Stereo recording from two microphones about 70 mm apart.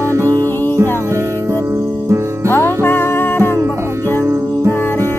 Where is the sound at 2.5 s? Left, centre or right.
Left.